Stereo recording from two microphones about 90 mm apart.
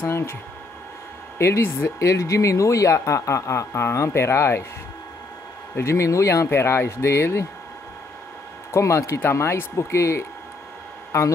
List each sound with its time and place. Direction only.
0.0 s speech: 30° left (ahead or behind)
1.4 s speech: 30° left (ahead or behind)
5.8 s speech: 30° left (ahead or behind)
8.7 s speech: 30° left (ahead or behind)